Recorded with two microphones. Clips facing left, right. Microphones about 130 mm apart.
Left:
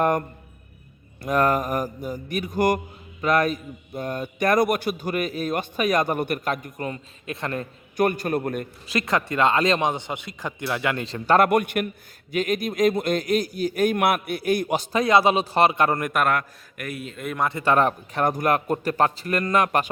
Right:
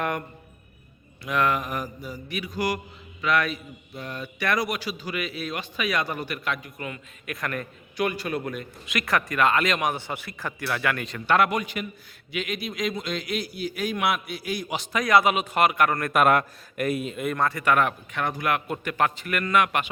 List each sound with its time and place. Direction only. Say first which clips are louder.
0.0 s a man's voice: left 7 dB; 40° left (ahead or behind)
1.2 s mantra: left 4 dB; 40° left (ahead or behind)
7.9 s mantra: left 5 dB; 50° left (ahead or behind)
8.9 s speech: left 2 dB; 25° left (ahead or behind)
11.4 s a man's voice: left 7 dB; 55° left (ahead or behind)
12.3 s mantra: left 7 dB; 45° left (ahead or behind)
14.9 s speech: left 2 dB; 30° left (ahead or behind)
16.3 s a man's voice: right 3 dB; 25° right (ahead or behind)
17.3 s speech: left 2 dB; 15° left (ahead or behind)
17.6 s a man's voice: left 5 dB; 30° left (ahead or behind)